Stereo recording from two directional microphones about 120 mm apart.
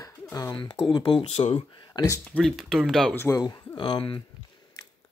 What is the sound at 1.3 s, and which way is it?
Speech, 60° left (ahead or behind).